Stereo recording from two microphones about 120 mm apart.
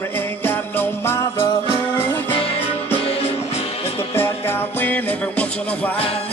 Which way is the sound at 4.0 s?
20° left (ahead or behind).